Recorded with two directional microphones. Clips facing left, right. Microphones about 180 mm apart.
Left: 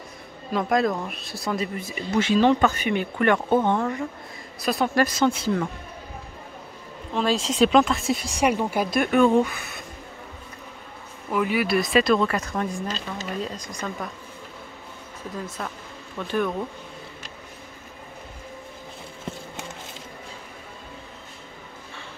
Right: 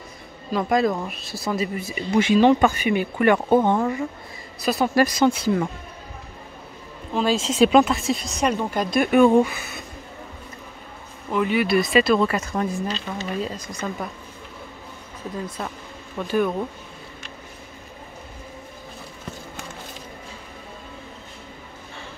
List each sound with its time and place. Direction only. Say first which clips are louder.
0.5 s speech: right 2 dB; centre (ahead or behind)
4.6 s speech: right 3 dB; centre (ahead or behind)
5.0 s speech: right 3 dB; 15° right (ahead or behind)
7.2 s speech: right 2 dB; centre (ahead or behind)
8.4 s speech: left 2 dB; 10° left (ahead or behind)
9.1 s speech: right 3 dB; 15° right (ahead or behind)
9.5 s speech: right 2 dB; centre (ahead or behind)
11.2 s speech: right 2 dB; 5° left (ahead or behind)
12.8 s speech: right 3 dB; 40° left (ahead or behind)
13.4 s speech: right 2 dB; 5° right (ahead or behind)
16.2 s speech: right 3 dB; 5° right (ahead or behind)